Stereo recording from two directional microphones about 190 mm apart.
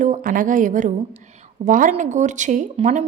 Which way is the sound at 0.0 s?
45° right (ahead or behind).